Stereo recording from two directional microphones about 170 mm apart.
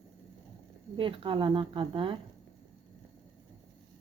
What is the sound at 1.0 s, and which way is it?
A woman's voice, 30° right (ahead or behind).